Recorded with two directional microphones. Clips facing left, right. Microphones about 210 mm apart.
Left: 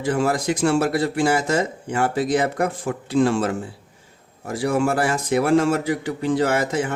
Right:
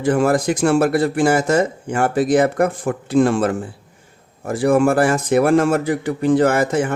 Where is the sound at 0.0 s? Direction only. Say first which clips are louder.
Right 5 dB; 50° right (ahead or behind).